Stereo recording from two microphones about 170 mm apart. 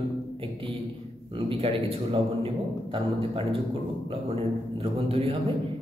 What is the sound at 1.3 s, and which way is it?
A man's voice, 30° right (ahead or behind).